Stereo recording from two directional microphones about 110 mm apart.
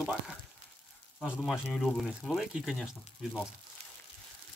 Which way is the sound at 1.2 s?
Centre (ahead or behind).